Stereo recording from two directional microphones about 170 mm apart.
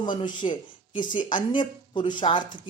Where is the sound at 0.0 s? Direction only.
25° left (ahead or behind).